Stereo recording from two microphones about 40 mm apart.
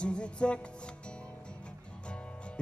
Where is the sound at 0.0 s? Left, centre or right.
Left.